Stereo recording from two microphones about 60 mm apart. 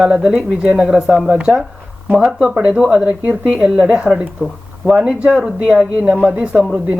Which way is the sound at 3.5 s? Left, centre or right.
Centre.